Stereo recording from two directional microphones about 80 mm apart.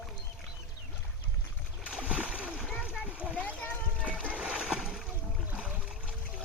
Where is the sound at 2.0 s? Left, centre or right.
Centre.